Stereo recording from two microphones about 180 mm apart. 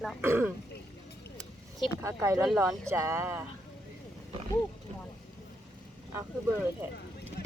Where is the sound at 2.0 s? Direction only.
15° right (ahead or behind).